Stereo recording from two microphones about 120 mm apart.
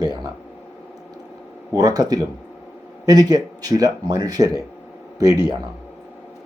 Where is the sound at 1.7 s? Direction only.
30° right (ahead or behind).